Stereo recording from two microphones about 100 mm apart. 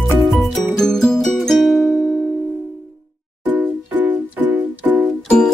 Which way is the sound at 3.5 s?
20° right (ahead or behind).